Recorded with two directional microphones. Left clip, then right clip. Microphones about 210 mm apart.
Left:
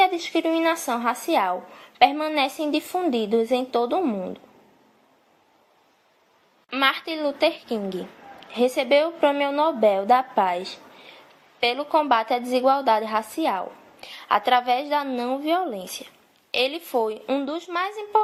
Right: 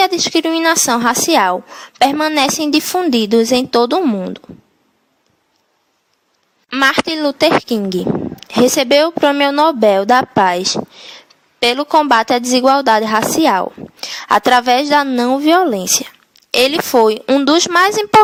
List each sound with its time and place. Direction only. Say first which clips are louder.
0.0 s a woman's voice: right 7 dB; 45° right (ahead or behind)
6.7 s a woman's voice: right 9 dB; 50° right (ahead or behind)